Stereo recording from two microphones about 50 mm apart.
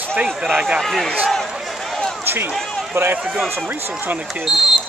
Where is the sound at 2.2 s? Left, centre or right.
Right.